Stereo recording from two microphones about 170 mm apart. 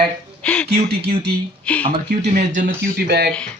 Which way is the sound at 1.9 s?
40° right (ahead or behind).